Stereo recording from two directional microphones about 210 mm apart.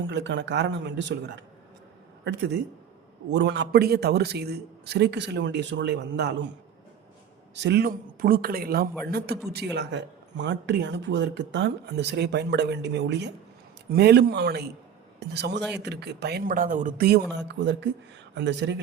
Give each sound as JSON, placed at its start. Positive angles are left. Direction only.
{"t": 0.1, "sound": "speech", "side_deg": -55}
{"t": 2.2, "sound": "speech", "side_deg": -55}
{"t": 7.5, "sound": "speech", "side_deg": -55}
{"t": 17.3, "sound": "speech", "side_deg": -55}